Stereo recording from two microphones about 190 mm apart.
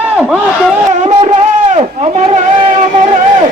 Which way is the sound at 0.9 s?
35° right (ahead or behind).